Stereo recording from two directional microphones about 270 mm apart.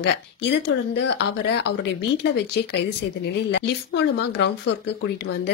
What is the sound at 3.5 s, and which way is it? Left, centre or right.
Speech, left.